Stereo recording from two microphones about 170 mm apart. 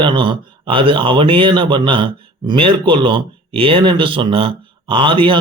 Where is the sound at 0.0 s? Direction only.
30° right (ahead or behind).